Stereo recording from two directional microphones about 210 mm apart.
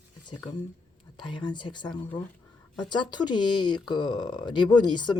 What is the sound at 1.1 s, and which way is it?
Speech, 20° left (ahead or behind).